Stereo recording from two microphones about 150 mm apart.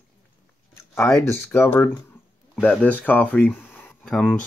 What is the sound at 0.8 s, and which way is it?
Speech, 20° left (ahead or behind).